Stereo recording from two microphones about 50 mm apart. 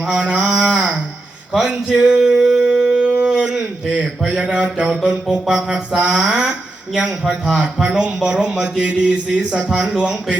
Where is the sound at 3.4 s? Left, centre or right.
Centre.